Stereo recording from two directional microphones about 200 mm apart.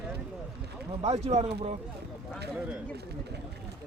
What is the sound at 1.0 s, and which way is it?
Speech, 35° right (ahead or behind).